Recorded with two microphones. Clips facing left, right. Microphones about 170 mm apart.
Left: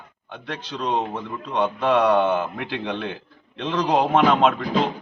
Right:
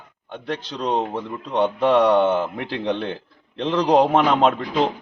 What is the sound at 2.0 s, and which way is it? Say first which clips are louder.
A man's voice: right 2 dB; 30° right (ahead or behind).